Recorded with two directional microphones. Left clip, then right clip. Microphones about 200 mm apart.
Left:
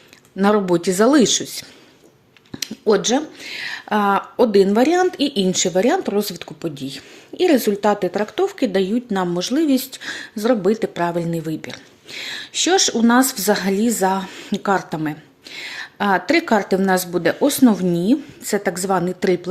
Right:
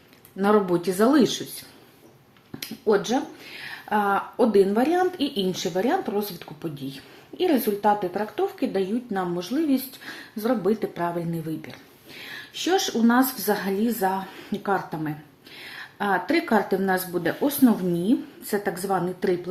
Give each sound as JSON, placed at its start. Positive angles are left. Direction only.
{"t": 0.3, "sound": "speech", "side_deg": 35}